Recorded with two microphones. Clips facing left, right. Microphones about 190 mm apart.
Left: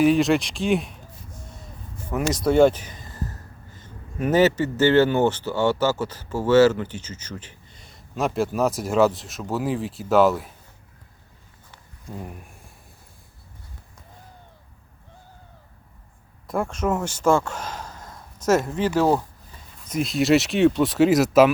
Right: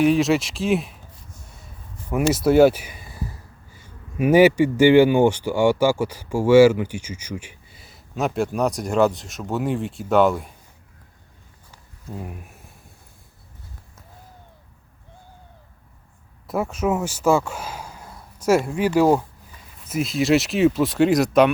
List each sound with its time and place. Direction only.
0.0 s speech: centre (ahead or behind)
2.1 s speech: 5° right (ahead or behind)
11.7 s a sound: 5° right (ahead or behind)
16.5 s speech: 5° right (ahead or behind)
19.9 s speech: centre (ahead or behind)